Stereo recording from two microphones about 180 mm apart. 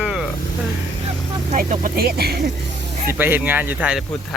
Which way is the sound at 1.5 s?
45° right (ahead or behind).